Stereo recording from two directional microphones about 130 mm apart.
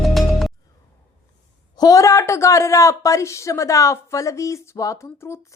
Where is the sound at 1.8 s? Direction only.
25° left (ahead or behind).